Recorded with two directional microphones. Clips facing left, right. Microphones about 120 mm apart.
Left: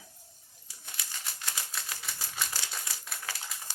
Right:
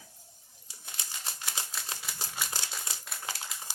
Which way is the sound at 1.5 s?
25° right (ahead or behind).